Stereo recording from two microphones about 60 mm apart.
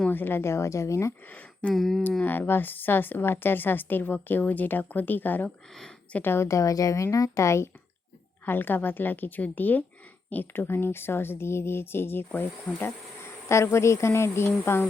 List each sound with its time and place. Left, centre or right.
0.1 s speech: left
1.3 s speech: left
1.7 s speech: centre
2.2 s a woman's voice: left
6.5 s speech: left
8.4 s a woman's voice: left
13.5 s speech: left